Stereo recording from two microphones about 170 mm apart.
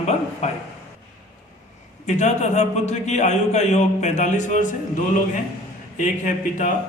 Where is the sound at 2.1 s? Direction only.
45° left (ahead or behind).